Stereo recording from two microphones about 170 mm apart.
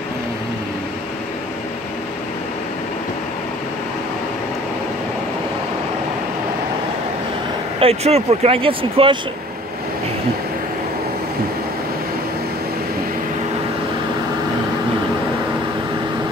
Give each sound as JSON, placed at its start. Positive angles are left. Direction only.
{"t": 7.8, "sound": "speech", "side_deg": -35}